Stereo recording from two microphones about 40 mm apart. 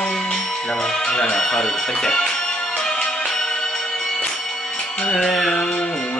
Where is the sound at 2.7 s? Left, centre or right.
Centre.